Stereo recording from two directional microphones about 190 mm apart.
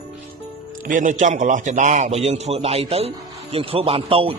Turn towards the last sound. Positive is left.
turn(degrees=-30)  # may be behind; listen again after turning